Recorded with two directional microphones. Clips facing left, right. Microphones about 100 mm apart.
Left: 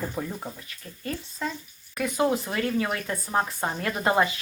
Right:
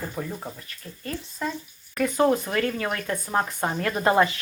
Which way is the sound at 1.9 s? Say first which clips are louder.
Right 3 dB; 10° left (ahead or behind).